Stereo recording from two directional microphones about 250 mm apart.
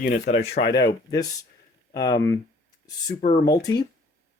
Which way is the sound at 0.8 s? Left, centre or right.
Centre.